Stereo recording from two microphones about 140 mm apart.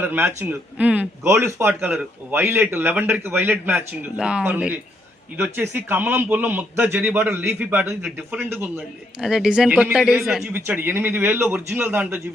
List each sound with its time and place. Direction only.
0.0 s a man's voice: 15° right (ahead or behind)